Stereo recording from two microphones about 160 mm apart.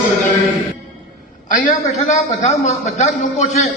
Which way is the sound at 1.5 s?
55° left (ahead or behind).